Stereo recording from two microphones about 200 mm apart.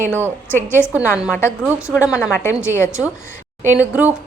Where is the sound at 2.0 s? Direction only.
5° right (ahead or behind).